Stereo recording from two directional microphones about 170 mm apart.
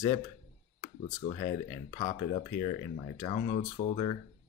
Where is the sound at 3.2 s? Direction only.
40° left (ahead or behind).